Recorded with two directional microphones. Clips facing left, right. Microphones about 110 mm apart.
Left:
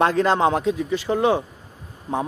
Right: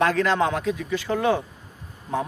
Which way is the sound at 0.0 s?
30° left (ahead or behind).